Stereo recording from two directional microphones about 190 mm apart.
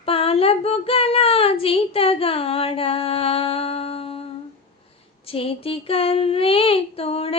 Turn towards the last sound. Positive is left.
turn(degrees=30)  # may be behind; listen again after turning